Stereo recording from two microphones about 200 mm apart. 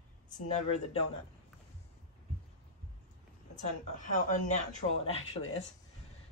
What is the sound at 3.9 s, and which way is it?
Speech, 40° left (ahead or behind).